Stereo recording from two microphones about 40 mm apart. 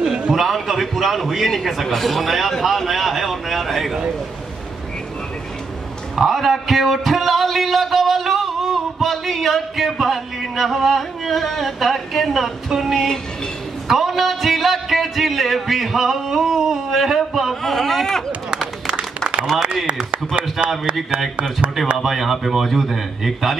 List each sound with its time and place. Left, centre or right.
0.3 s a man's voice: centre
6.1 s a man's voice: centre
17.6 s a man's voice: centre
18.9 s applause: centre
21.9 s a man's voice: centre